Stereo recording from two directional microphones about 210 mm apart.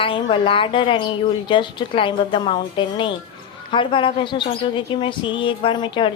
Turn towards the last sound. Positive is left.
turn(degrees=25)  # may be behind; listen again after turning